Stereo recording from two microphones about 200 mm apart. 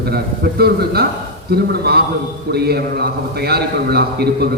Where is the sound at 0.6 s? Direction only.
50° right (ahead or behind).